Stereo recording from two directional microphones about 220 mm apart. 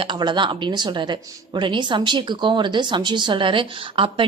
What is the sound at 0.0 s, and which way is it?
Speech, 20° right (ahead or behind).